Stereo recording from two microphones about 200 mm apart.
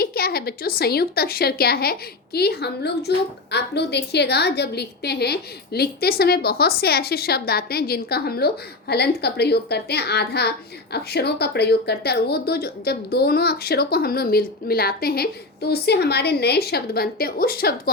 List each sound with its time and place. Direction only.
0.0 s a woman's voice: 50° left (ahead or behind)